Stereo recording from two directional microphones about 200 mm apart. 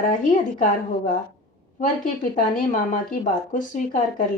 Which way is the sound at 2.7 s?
40° left (ahead or behind).